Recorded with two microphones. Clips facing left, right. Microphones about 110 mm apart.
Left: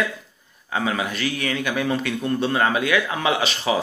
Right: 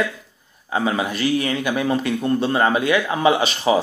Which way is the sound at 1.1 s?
5° right (ahead or behind).